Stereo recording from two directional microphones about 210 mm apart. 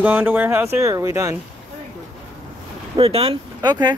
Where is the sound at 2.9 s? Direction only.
25° right (ahead or behind).